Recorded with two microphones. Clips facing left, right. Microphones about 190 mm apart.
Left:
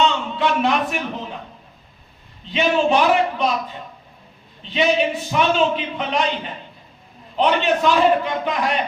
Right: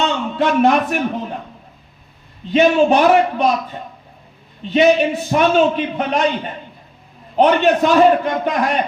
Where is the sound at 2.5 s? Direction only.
45° right (ahead or behind).